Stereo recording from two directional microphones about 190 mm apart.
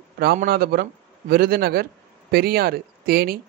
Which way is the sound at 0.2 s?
50° right (ahead or behind).